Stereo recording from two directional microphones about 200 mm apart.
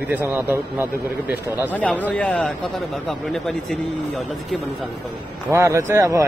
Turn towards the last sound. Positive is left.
turn(degrees=-15)  # may be behind; listen again after turning